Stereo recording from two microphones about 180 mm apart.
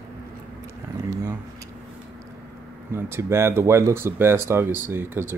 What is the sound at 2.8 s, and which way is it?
Speech, 15° right (ahead or behind).